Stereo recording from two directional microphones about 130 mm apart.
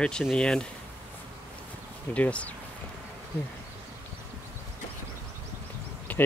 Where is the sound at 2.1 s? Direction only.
10° left (ahead or behind).